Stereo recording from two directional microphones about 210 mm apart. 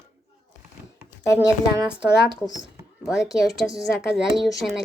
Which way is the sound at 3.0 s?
Centre (ahead or behind).